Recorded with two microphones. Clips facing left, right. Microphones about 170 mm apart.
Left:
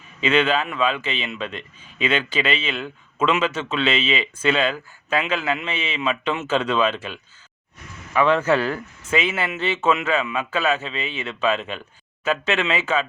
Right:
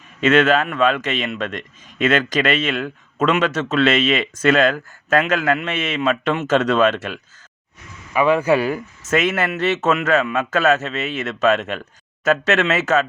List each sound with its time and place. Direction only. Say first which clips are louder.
0.2 s a man's voice: right 5 dB; 45° right (ahead or behind)
8.1 s a man's voice: right 2 dB; 10° right (ahead or behind)
9.0 s a man's voice: right 4 dB; 45° right (ahead or behind)